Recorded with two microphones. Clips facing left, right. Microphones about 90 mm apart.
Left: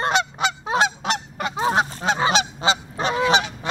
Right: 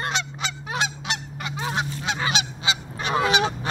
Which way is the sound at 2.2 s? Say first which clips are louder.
Left 6 dB; 35° left (ahead or behind).